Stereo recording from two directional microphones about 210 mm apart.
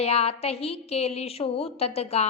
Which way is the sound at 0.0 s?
30° left (ahead or behind).